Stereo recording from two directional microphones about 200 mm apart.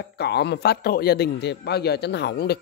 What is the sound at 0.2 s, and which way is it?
A man's voice, 60° left (ahead or behind).